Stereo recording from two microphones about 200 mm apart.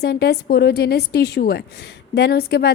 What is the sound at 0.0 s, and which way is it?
A woman's voice, 55° left (ahead or behind).